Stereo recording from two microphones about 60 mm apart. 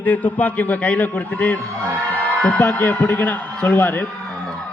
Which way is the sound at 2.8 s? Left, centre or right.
Left.